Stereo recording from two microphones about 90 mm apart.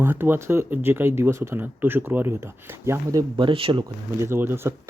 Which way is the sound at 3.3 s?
80° right.